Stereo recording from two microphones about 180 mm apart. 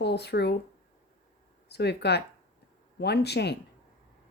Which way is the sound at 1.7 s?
65° left (ahead or behind).